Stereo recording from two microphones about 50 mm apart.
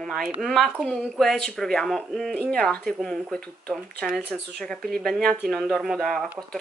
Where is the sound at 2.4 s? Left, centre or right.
Left.